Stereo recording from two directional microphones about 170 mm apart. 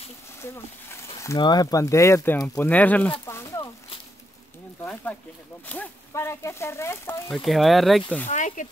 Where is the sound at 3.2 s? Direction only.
15° left (ahead or behind).